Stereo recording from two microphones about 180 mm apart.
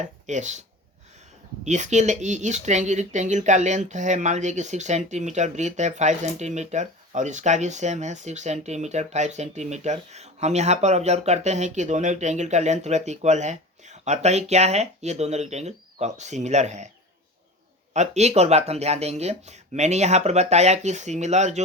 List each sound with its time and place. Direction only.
0.0 s speech: 40° right (ahead or behind)
1.6 s speech: 40° right (ahead or behind)
17.9 s speech: 40° right (ahead or behind)